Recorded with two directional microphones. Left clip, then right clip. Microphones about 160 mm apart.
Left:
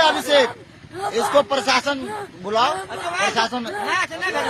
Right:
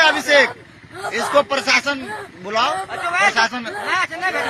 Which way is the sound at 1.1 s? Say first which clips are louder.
Right 1 dB; centre (ahead or behind).